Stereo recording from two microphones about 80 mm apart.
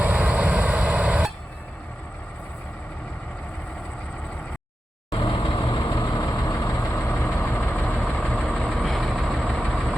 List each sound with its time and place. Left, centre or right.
0.0 s vehicle: centre
5.1 s vehicle: left
5.7 s vehicle: left
6.5 s vehicle: left
6.9 s vehicle: centre
8.3 s train: centre
8.6 s train: centre
9.2 s vehicle: centre